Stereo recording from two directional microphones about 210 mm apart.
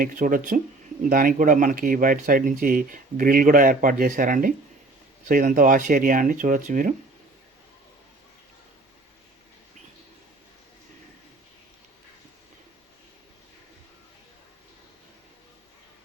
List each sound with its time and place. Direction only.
0.0 s speech: 40° right (ahead or behind)